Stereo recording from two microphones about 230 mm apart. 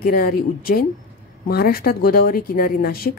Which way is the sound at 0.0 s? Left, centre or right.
Left.